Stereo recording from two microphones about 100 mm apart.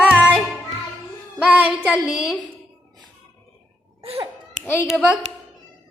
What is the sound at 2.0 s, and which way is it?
Speech, 5° right (ahead or behind).